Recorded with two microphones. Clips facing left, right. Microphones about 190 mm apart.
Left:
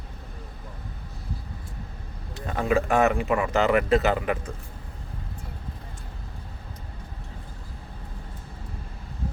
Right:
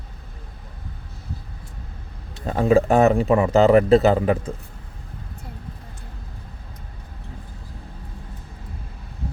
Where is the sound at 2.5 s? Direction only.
35° right (ahead or behind).